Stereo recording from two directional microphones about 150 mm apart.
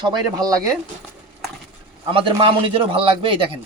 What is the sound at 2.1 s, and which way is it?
Speech, 35° right (ahead or behind).